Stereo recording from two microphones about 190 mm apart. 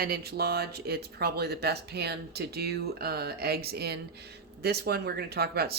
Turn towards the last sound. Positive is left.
turn(degrees=-55)  # may be behind; listen again after turning